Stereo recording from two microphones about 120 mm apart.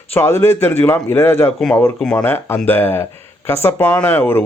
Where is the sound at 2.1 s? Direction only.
20° left (ahead or behind).